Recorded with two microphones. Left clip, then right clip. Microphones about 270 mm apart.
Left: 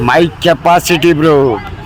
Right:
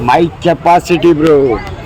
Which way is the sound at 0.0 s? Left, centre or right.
Left.